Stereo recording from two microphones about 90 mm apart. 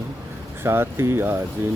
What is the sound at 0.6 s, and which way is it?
Speech, 25° right (ahead or behind).